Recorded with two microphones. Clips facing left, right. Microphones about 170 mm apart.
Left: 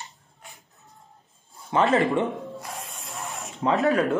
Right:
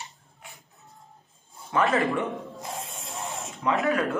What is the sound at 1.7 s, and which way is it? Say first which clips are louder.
Speech: left 3 dB; 20° left (ahead or behind).